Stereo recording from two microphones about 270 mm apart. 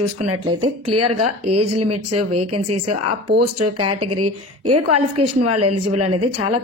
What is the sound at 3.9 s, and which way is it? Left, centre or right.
A woman's voice, right.